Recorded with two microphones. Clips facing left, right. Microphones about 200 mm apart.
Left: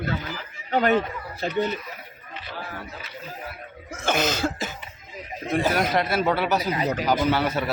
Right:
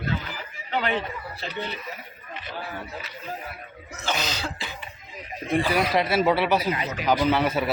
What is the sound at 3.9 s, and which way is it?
Cough, 50° left (ahead or behind).